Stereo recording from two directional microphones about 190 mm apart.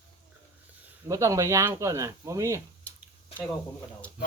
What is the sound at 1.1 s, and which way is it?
Speech, 15° right (ahead or behind).